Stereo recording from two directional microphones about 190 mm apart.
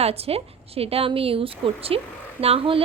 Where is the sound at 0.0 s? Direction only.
30° right (ahead or behind).